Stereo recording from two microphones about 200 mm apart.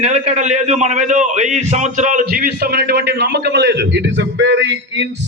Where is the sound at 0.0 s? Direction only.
35° right (ahead or behind).